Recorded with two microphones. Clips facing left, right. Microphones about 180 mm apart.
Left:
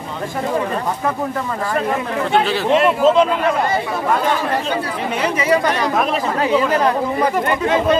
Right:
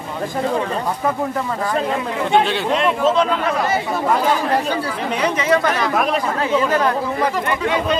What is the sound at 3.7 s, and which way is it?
Speech, 10° right (ahead or behind).